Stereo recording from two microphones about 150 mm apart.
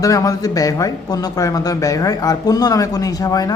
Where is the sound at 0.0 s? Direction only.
20° left (ahead or behind).